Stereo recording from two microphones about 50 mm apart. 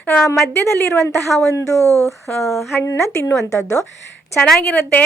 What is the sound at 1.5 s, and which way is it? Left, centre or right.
Speech, left.